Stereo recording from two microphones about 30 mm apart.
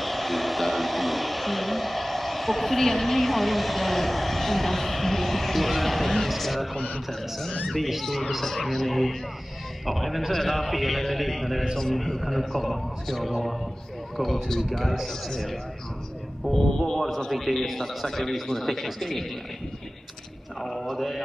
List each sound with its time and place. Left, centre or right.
0.0 s a man's voice: centre
16.5 s a man's voice: centre
20.6 s a man's voice: centre